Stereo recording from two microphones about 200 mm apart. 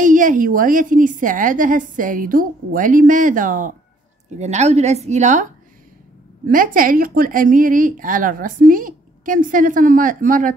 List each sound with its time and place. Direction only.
0.0 s a woman's voice: 40° right (ahead or behind)